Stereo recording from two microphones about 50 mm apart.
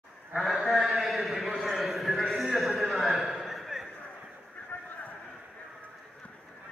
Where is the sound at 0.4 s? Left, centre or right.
Centre.